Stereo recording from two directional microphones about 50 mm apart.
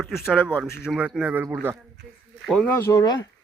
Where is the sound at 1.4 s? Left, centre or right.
Right.